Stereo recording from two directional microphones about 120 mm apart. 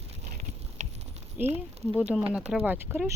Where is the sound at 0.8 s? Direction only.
90° right.